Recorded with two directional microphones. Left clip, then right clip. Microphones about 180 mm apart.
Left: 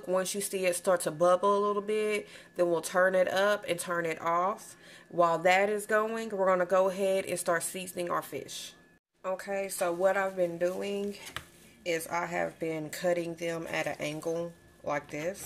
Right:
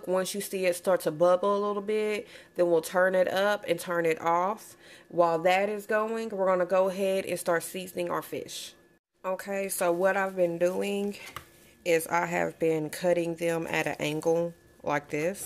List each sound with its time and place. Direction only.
0.1 s speech: 30° right (ahead or behind)
5.1 s speech: 25° right (ahead or behind); by 15.3 s 50° right (ahead or behind)